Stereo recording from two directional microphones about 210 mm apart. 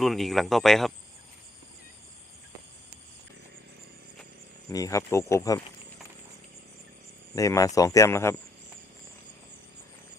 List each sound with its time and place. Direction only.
0.0 s speech: centre (ahead or behind)
4.7 s speech: 15° left (ahead or behind)
7.3 s speech: 15° left (ahead or behind)